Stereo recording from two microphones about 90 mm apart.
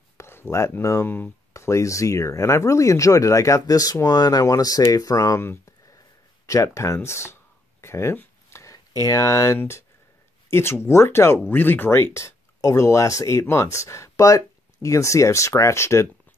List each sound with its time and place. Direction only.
0.2 s speech: 30° left (ahead or behind)
1.5 s speech: 35° left (ahead or behind)
7.8 s a sound: 30° left (ahead or behind)
8.7 s speech: 40° left (ahead or behind)